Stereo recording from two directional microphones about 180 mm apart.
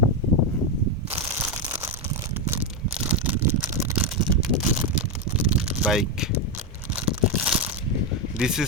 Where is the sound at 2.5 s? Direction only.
5° right (ahead or behind).